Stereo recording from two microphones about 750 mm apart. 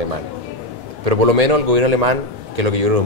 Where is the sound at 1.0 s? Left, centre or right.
Right.